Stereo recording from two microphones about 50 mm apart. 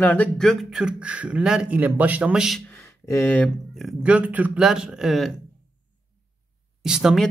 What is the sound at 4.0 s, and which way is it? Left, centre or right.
Speech, right.